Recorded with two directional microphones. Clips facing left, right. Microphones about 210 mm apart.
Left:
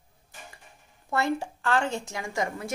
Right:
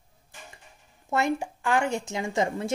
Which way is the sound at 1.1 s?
15° right (ahead or behind).